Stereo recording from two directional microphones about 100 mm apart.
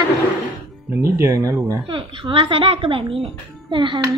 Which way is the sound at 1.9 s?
60° right (ahead or behind).